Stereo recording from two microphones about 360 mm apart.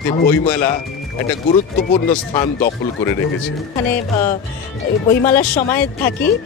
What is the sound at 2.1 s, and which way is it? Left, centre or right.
Speech, centre.